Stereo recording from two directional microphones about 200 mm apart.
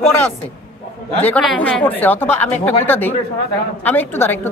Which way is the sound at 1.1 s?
5° left (ahead or behind).